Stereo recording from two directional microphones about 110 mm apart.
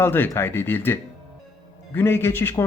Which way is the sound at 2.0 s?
20° left (ahead or behind).